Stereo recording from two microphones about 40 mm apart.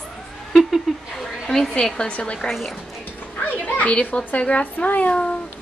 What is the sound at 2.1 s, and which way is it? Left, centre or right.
Speech, left.